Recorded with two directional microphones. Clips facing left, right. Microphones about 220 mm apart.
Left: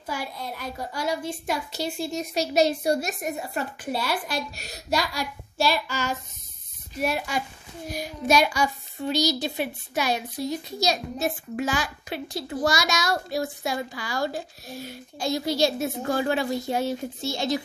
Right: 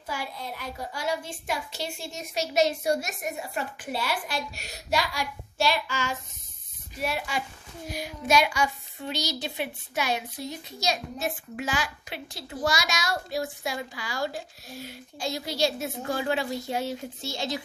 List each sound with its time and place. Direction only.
0.0 s a woman's voice: 40° left (ahead or behind)